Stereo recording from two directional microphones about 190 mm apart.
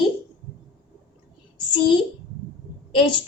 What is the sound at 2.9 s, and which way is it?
Speech, 25° left (ahead or behind).